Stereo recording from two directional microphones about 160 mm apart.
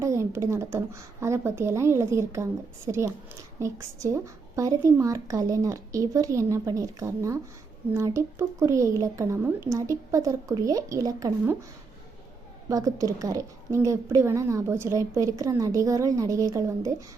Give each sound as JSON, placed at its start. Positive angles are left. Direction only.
{"t": 0.0, "sound": "a woman's voice", "side_deg": -15}
{"t": 12.6, "sound": "a woman's voice", "side_deg": -20}